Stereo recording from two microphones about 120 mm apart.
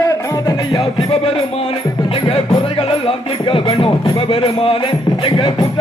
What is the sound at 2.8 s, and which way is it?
Music, 50° left (ahead or behind).